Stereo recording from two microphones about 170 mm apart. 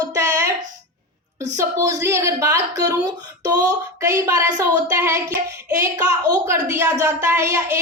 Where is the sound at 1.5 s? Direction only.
20° right (ahead or behind).